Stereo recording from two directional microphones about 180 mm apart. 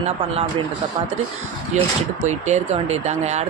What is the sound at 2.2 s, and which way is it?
Speech, 40° right (ahead or behind).